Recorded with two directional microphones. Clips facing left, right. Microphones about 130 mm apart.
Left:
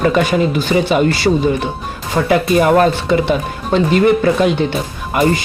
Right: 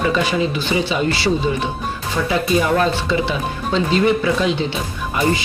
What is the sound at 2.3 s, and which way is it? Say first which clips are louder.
Speech: left 6 dB; 55° left (ahead or behind).